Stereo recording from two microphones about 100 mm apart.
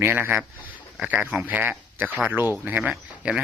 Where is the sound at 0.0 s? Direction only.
20° right (ahead or behind).